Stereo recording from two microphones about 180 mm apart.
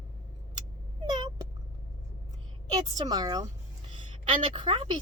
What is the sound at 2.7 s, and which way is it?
A woman's voice, 25° right (ahead or behind).